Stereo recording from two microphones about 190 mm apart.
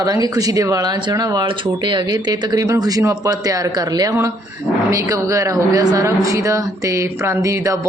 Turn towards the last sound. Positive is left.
turn(degrees=-15)  # may be behind; listen again after turning